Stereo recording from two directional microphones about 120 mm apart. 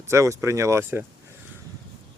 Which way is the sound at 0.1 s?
25° right (ahead or behind).